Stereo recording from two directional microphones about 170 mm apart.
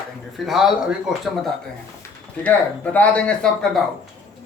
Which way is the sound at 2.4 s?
10° left (ahead or behind).